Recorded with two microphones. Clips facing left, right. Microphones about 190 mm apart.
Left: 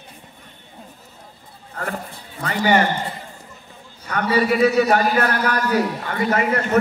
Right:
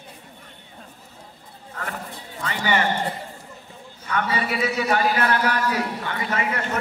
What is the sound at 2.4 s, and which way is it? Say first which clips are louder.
Speech: left 6 dB; 40° left (ahead or behind).